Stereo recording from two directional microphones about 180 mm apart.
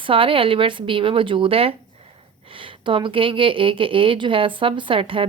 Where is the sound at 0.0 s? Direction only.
30° right (ahead or behind).